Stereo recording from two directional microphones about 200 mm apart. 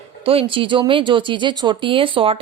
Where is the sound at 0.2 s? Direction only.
30° right (ahead or behind).